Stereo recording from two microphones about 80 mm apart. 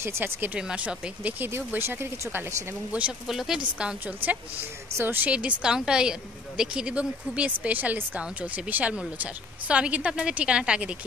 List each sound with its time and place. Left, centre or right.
0.0 s speech: right
0.6 s a woman's voice: centre
1.7 s speech: right
3.3 s speech: centre
4.9 s a woman's voice: right